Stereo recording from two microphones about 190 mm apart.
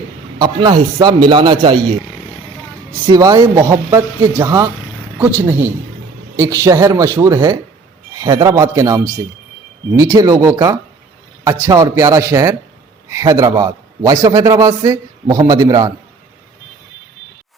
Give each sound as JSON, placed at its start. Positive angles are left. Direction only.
{"t": 0.3, "sound": "a man's voice", "side_deg": -20}
{"t": 3.1, "sound": "a man's voice", "side_deg": -20}